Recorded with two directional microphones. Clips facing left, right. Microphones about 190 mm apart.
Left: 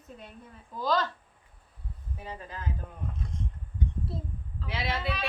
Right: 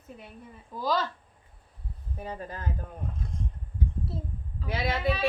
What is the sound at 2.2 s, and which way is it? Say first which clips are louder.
Speech: right 4 dB; 45° right (ahead or behind).